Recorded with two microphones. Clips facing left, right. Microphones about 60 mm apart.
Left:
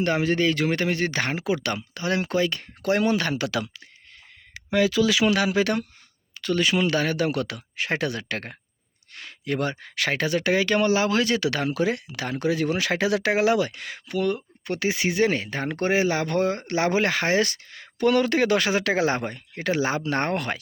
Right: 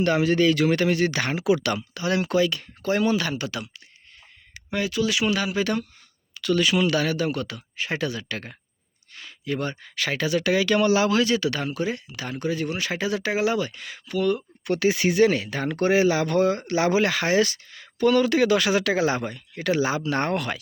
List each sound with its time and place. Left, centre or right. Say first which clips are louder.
0.0 s speech: right 2 dB; left
2.8 s speech: left 1 dB; left
3.3 s speech: left 4 dB; left
4.7 s speech: left 4 dB; left
6.3 s speech: right 1 dB; left
7.2 s speech: left 1 dB; left
11.3 s speech: left 2 dB; left
14.6 s speech: right 4 dB; left
17.7 s speech: right 1 dB; left